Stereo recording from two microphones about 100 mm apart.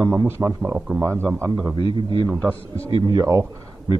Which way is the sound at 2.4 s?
15° left (ahead or behind).